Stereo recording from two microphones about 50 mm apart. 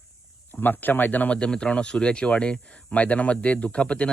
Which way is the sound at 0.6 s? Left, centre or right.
Left.